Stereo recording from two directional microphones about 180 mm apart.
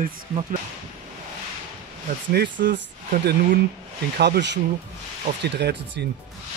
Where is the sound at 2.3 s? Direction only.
60° right (ahead or behind).